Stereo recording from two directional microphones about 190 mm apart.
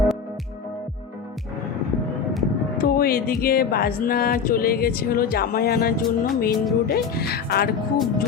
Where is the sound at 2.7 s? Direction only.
50° left (ahead or behind).